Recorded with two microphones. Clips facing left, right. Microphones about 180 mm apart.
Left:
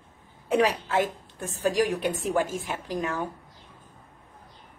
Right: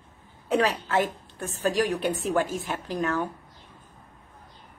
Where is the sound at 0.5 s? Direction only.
15° left (ahead or behind).